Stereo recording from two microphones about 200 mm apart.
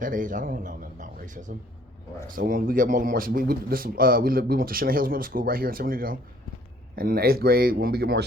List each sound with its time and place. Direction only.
0.0 s a man's voice: 40° right (ahead or behind)